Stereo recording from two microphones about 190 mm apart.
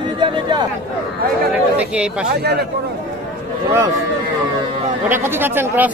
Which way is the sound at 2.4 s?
60° right (ahead or behind).